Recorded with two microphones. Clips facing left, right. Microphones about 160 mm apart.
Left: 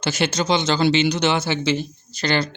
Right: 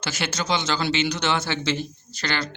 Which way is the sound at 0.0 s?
20° left (ahead or behind).